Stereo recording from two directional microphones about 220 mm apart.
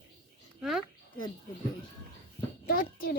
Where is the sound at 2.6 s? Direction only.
40° left (ahead or behind).